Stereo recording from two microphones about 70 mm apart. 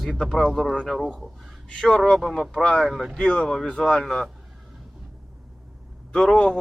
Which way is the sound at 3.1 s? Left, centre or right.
Centre.